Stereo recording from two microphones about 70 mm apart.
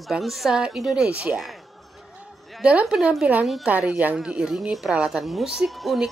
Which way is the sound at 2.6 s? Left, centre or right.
Centre.